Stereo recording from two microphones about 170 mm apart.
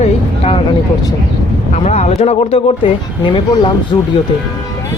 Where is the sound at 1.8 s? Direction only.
40° left (ahead or behind).